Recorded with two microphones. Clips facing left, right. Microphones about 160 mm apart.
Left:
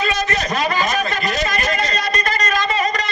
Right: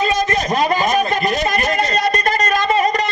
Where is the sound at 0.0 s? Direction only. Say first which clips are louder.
Right 3 dB; 45° right (ahead or behind).